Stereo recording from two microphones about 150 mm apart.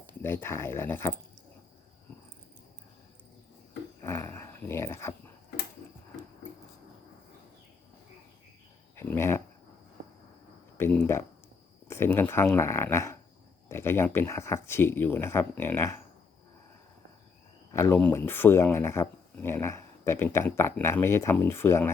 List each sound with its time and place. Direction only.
0.2 s speech: 15° left (ahead or behind)
4.0 s speech: 20° left (ahead or behind)
9.0 s a sound: 15° left (ahead or behind)
10.8 s a sound: 15° left (ahead or behind)
11.9 s speech: 15° left (ahead or behind)
17.7 s speech: 15° left (ahead or behind)